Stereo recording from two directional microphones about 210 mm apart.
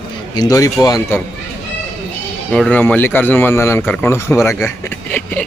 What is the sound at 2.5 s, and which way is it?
Speech, 5° left (ahead or behind).